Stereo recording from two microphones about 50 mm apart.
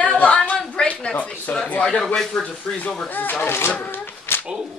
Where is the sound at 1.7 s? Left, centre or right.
Left.